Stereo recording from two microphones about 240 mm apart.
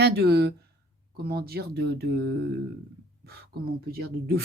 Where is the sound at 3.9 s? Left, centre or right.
Right.